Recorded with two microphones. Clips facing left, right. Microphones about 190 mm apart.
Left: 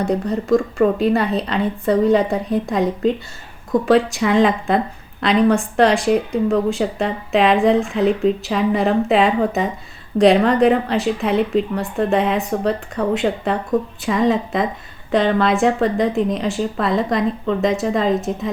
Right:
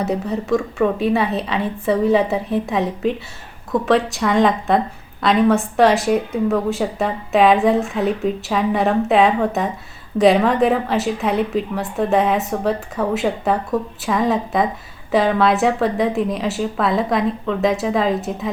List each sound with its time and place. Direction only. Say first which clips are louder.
0.0 s a woman's voice: left 2 dB; 5° right (ahead or behind)